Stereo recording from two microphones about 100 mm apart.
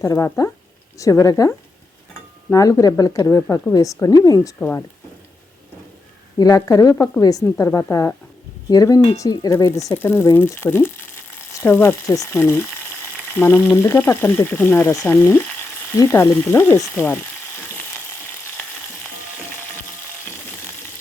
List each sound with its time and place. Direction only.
0.0 s a woman's voice: 35° left (ahead or behind)
6.4 s a woman's voice: 40° left (ahead or behind)
9.6 s speech: 30° left (ahead or behind)